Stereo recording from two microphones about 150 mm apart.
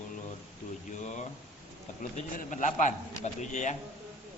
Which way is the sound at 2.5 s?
55° left (ahead or behind).